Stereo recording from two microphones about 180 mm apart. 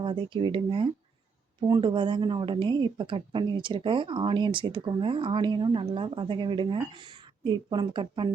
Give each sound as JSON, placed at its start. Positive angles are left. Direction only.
{"t": 0.0, "sound": "a woman's voice", "side_deg": -25}